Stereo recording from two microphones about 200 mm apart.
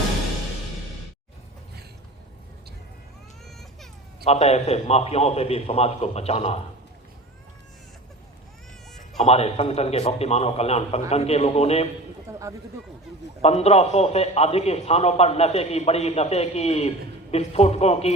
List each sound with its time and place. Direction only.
4.3 s a man's voice: 30° left (ahead or behind)
9.1 s a man's voice: 30° left (ahead or behind)
12.3 s speech: 15° right (ahead or behind)
13.4 s a man's voice: 30° left (ahead or behind)